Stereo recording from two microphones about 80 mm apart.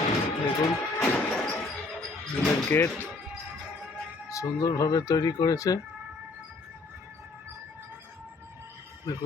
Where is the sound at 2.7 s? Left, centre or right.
Left.